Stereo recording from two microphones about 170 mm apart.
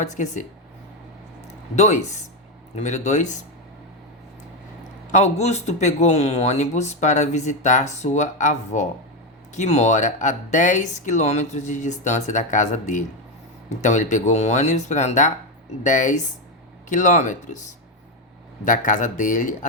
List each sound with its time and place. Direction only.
0.0 s speech: 45° left (ahead or behind)
1.7 s speech: 40° left (ahead or behind)
5.1 s speech: 40° left (ahead or behind)